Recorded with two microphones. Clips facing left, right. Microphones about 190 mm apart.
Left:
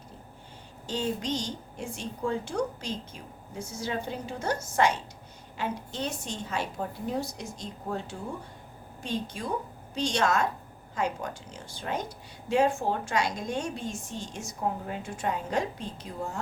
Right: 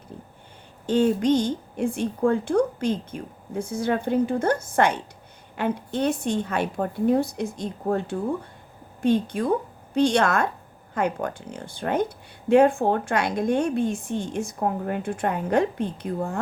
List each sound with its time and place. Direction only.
0.9 s speech: 55° right (ahead or behind)